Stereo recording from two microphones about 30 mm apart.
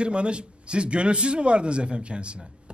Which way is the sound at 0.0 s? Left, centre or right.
Right.